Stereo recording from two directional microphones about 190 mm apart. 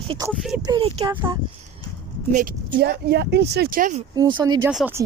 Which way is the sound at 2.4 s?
45° right (ahead or behind).